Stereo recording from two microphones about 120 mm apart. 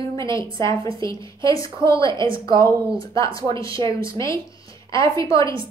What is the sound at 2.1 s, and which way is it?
Speech, 45° right (ahead or behind).